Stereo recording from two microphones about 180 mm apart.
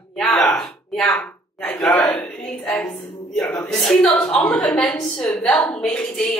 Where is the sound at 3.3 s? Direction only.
5° left (ahead or behind).